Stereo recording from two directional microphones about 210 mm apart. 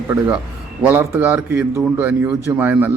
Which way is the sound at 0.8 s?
10° right (ahead or behind).